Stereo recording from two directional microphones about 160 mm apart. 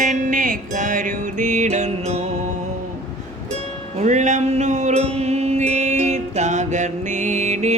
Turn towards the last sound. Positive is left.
turn(degrees=-45)  # may be behind; listen again after turning